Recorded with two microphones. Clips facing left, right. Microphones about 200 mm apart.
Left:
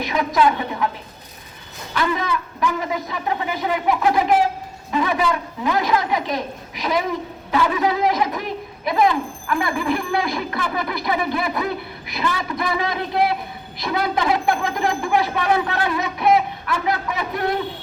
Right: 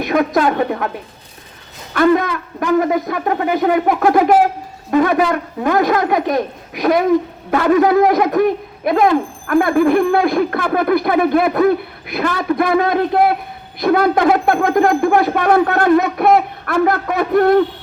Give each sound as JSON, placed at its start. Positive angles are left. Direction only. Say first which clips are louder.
{"t": 0.0, "sound": "speech", "louder": "right 4 dB", "side_deg": -50}
{"t": 1.9, "sound": "speech", "louder": "right 9 dB", "side_deg": -55}